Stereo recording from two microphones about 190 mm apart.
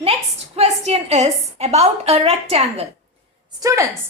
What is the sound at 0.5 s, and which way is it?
A woman's voice, 35° right (ahead or behind).